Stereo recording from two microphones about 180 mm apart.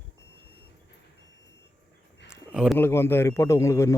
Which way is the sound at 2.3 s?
5° right (ahead or behind).